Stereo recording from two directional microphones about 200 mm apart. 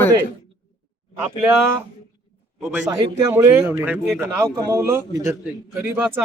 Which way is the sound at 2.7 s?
10° right (ahead or behind).